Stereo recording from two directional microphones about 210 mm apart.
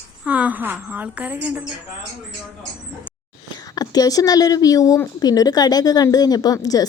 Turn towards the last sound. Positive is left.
turn(degrees=15)  # may be behind; listen again after turning